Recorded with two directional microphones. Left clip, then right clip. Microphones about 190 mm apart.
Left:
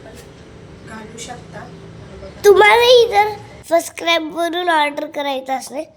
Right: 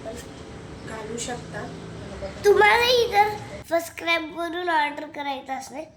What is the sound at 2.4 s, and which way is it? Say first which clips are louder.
A child's voice: left 7 dB; 35° left (ahead or behind).